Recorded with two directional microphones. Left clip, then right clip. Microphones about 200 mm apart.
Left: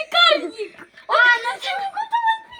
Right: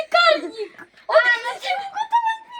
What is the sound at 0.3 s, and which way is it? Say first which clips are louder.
Giggle: even; 10° left (ahead or behind).